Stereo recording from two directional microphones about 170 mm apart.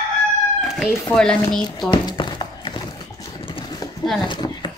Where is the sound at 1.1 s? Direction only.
5° left (ahead or behind).